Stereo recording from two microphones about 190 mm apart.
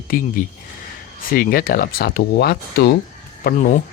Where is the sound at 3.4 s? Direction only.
50° left (ahead or behind).